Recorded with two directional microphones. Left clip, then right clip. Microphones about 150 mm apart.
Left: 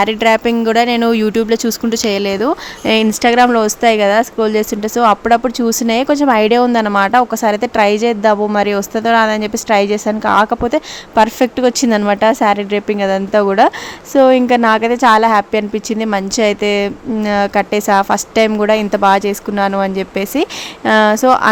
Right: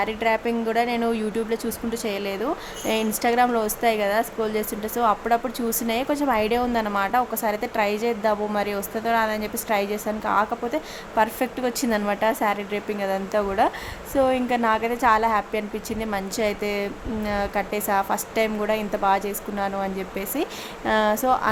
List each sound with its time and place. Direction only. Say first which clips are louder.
0.0 s speech: left 11 dB; 40° left (ahead or behind)